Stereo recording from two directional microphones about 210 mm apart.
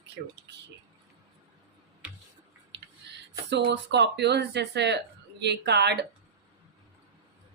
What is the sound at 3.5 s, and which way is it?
Speech, 55° right (ahead or behind).